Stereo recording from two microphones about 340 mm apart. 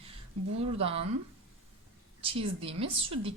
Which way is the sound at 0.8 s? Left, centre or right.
Centre.